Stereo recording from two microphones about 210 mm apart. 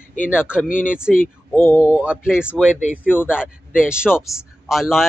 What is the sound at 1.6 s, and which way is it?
Speech, 10° left (ahead or behind).